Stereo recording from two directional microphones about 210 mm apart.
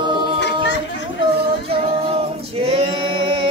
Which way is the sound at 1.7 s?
25° right (ahead or behind).